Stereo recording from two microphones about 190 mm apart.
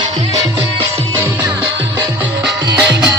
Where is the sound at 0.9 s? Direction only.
15° right (ahead or behind).